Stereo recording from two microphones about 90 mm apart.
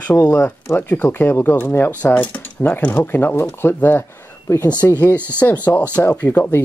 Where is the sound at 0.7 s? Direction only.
20° left (ahead or behind).